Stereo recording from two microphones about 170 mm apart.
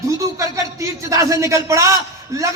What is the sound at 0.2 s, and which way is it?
A man's voice, 20° right (ahead or behind).